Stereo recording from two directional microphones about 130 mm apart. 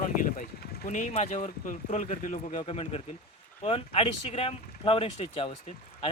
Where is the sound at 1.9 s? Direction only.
65° left (ahead or behind).